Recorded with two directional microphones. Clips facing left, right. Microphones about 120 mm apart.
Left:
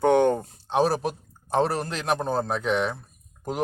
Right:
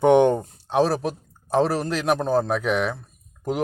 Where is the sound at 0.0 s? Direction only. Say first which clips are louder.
Right 3 dB; 15° right (ahead or behind).